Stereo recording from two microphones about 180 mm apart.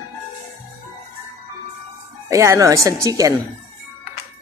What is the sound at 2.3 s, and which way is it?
Speech, 15° right (ahead or behind).